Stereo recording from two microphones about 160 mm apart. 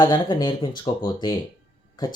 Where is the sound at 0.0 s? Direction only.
25° left (ahead or behind).